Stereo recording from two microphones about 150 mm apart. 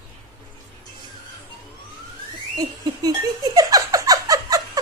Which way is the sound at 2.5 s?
25° right (ahead or behind).